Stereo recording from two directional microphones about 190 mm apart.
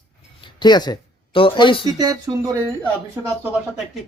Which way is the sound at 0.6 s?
20° left (ahead or behind).